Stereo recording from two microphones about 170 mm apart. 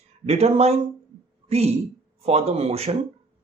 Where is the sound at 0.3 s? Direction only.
35° right (ahead or behind).